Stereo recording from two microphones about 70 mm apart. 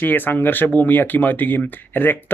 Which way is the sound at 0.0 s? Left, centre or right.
Left.